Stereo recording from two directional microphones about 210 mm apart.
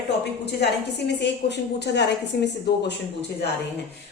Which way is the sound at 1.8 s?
55° left (ahead or behind).